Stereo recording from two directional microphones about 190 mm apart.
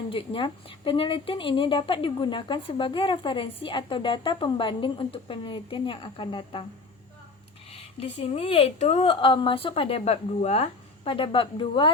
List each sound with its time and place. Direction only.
0.1 s speech: 25° left (ahead or behind)
7.7 s speech: 30° left (ahead or behind)